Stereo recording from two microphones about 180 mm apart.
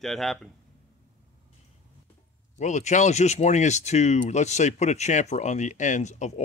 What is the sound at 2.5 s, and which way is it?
Speech, 40° left (ahead or behind).